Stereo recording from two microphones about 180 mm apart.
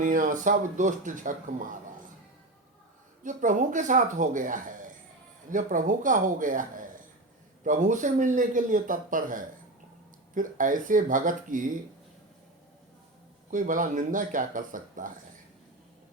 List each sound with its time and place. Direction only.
0.0 s speech: 45° right (ahead or behind)
3.2 s speech: 45° right (ahead or behind)
13.5 s speech: 45° right (ahead or behind)